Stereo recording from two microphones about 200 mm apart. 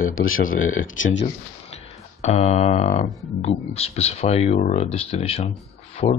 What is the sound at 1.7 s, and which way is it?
Speech, 35° left (ahead or behind).